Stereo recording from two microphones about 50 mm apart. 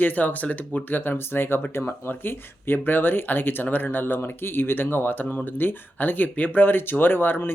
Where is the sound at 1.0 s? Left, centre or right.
Left.